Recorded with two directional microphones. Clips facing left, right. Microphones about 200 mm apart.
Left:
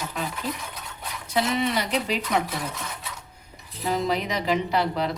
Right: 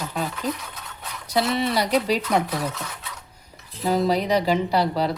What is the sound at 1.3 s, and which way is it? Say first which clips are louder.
Speech: right 2 dB; 35° right (ahead or behind).